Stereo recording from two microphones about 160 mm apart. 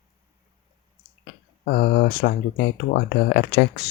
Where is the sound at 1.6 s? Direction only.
70° left (ahead or behind).